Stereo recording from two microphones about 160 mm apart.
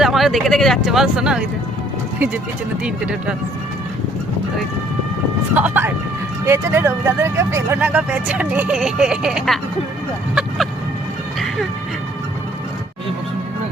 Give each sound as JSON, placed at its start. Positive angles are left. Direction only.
{"t": 0.0, "sound": "speech", "side_deg": 0}
{"t": 5.5, "sound": "speech", "side_deg": -10}
{"t": 11.3, "sound": "music", "side_deg": 0}